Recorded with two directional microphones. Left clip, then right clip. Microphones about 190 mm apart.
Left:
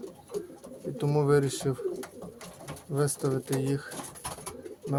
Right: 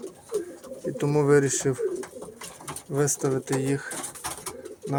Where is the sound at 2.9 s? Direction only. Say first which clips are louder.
Right 4 dB; 10° right (ahead or behind).